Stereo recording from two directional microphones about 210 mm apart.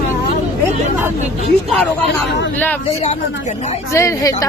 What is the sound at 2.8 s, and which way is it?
Speech, 30° left (ahead or behind).